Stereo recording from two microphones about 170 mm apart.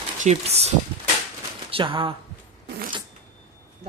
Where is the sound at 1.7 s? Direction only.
30° right (ahead or behind).